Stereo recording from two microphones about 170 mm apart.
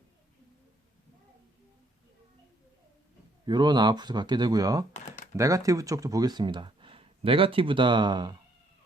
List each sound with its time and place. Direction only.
3.4 s speech: 25° right (ahead or behind)
4.9 s computer keyboard: 45° left (ahead or behind)
5.4 s speech: 20° right (ahead or behind)